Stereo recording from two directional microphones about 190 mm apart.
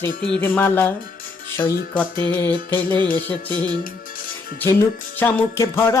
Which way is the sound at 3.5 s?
20° right (ahead or behind).